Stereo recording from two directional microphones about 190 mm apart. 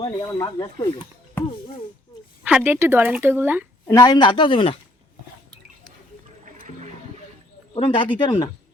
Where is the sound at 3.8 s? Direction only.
15° left (ahead or behind).